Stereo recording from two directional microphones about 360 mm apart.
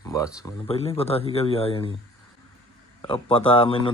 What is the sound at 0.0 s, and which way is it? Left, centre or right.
Speech, centre.